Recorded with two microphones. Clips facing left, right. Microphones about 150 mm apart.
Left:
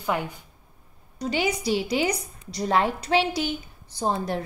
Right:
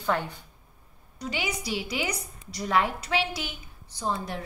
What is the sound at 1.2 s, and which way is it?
A woman's voice, 35° left (ahead or behind).